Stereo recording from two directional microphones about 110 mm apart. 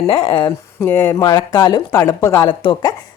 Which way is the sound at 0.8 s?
20° left (ahead or behind).